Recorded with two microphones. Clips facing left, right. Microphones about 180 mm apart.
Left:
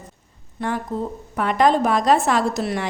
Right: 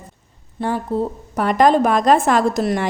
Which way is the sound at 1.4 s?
45° right (ahead or behind).